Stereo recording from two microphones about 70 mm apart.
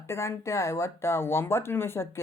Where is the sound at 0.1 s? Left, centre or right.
Left.